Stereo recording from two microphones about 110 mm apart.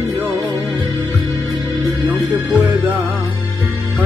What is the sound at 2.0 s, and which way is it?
Music, 45° right (ahead or behind).